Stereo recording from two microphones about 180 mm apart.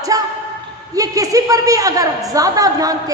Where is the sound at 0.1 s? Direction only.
20° right (ahead or behind).